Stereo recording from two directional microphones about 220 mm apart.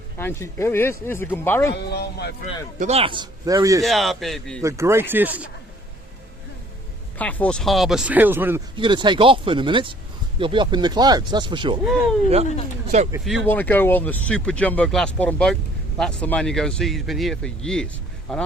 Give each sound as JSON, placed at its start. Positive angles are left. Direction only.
{"t": 0.2, "sound": "speech", "side_deg": 10}
{"t": 1.7, "sound": "a man's voice", "side_deg": 45}
{"t": 2.7, "sound": "speech", "side_deg": -30}
{"t": 3.8, "sound": "speech", "side_deg": 0}
{"t": 4.6, "sound": "speech", "side_deg": -15}
{"t": 7.2, "sound": "speech", "side_deg": 5}
{"t": 8.7, "sound": "speech", "side_deg": -20}
{"t": 13.2, "sound": "speech", "side_deg": 5}